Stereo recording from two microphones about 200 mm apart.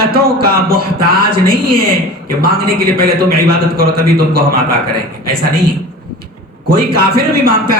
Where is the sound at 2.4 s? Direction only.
50° right (ahead or behind).